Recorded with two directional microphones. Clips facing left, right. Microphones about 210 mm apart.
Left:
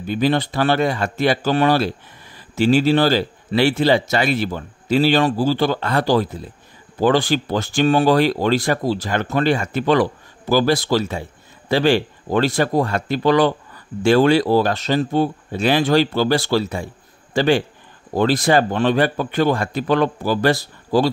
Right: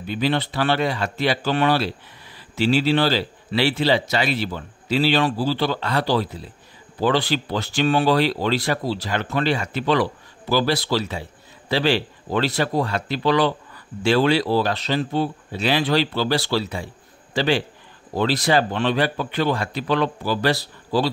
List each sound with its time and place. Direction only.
0.0 s speech: 45° left (ahead or behind)